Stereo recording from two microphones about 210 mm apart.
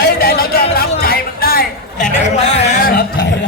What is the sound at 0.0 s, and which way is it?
Music, 45° left (ahead or behind).